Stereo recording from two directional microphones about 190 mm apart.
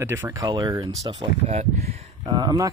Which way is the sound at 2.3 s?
20° right (ahead or behind).